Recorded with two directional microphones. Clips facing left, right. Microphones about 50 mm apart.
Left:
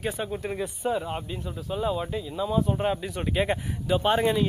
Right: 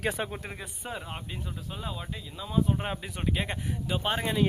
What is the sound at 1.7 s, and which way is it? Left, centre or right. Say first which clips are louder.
Speech: left 12 dB; centre.